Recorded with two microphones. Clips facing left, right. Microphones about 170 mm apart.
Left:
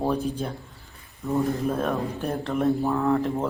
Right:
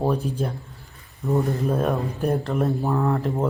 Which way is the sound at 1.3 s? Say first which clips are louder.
Right 2 dB; centre (ahead or behind).